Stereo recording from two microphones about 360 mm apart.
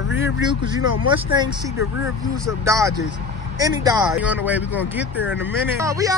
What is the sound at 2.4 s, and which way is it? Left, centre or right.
Speech, centre.